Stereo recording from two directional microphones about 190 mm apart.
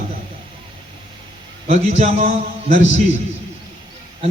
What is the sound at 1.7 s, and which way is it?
Speech, 35° right (ahead or behind).